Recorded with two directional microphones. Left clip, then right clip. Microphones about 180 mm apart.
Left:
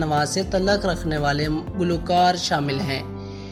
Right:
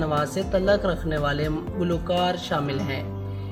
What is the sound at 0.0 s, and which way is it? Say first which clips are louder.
Speech: left 3 dB; 20° left (ahead or behind).